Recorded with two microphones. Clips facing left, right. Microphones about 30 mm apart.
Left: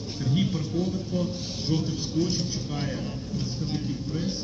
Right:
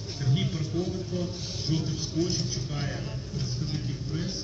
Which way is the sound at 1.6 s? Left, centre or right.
Left.